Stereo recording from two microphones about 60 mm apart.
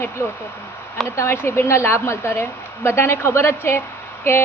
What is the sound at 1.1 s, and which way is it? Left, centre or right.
A woman's voice, left.